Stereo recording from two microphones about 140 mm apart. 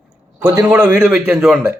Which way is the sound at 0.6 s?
10° right (ahead or behind).